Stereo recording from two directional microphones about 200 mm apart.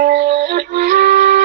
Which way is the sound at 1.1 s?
55° right (ahead or behind).